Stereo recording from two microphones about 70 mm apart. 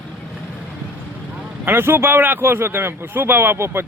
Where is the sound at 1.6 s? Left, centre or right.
Right.